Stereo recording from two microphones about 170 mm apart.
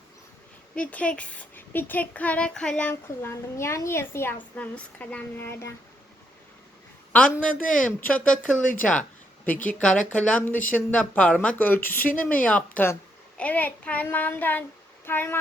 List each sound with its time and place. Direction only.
0.8 s a child's voice: 10° left (ahead or behind)
7.6 s speech: 50° left (ahead or behind)
7.9 s a child's voice: 10° left (ahead or behind)
8.4 s speech: 50° left (ahead or behind)
8.8 s a child's voice: 5° left (ahead or behind)
9.5 s speech: 50° left (ahead or behind)
9.7 s a child's voice: 5° left (ahead or behind)